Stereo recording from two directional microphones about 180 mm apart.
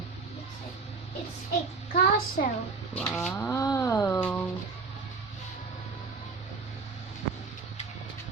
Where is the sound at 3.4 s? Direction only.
20° left (ahead or behind).